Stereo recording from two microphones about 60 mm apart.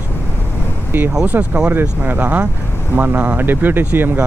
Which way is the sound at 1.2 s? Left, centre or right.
Right.